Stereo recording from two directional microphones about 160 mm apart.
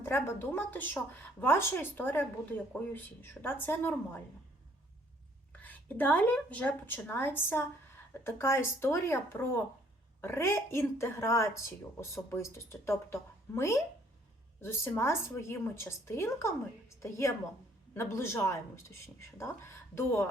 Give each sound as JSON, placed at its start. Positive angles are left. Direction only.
{"t": 0.0, "sound": "a woman's voice", "side_deg": 15}
{"t": 5.5, "sound": "a woman's voice", "side_deg": 10}